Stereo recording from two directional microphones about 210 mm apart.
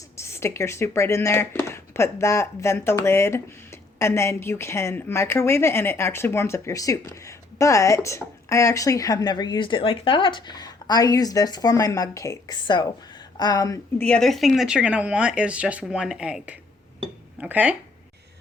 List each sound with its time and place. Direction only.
0.2 s speech: 10° left (ahead or behind)
14.0 s speech: 5° left (ahead or behind)